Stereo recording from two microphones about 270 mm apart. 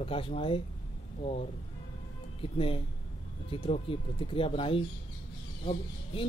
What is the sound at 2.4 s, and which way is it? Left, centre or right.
Speech, left.